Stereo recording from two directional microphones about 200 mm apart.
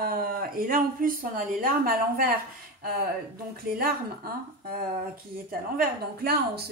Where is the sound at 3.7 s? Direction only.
50° right (ahead or behind).